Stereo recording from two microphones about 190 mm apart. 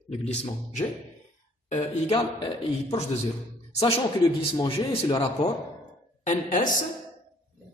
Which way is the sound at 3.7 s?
30° left (ahead or behind).